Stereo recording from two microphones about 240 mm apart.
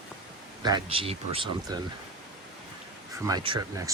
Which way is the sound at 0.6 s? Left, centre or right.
Centre.